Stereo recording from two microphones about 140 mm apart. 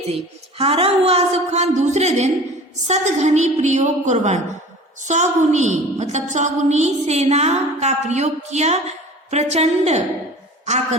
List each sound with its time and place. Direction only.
0.5 s a woman's voice: 45° right (ahead or behind)